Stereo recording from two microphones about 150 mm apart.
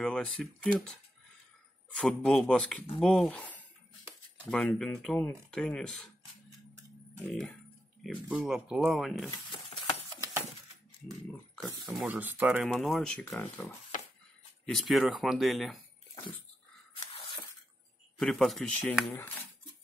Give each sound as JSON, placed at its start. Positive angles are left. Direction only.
{"t": 0.0, "sound": "speech", "side_deg": 5}
{"t": 2.0, "sound": "speech", "side_deg": 5}
{"t": 4.5, "sound": "speech", "side_deg": 5}
{"t": 7.2, "sound": "speech", "side_deg": 10}
{"t": 8.0, "sound": "speech", "side_deg": -5}
{"t": 11.5, "sound": "speech", "side_deg": 0}
{"t": 12.1, "sound": "speech", "side_deg": -10}
{"t": 12.6, "sound": "speech", "side_deg": 0}
{"t": 13.3, "sound": "speech", "side_deg": 10}
{"t": 14.7, "sound": "speech", "side_deg": 0}
{"t": 18.2, "sound": "speech", "side_deg": 0}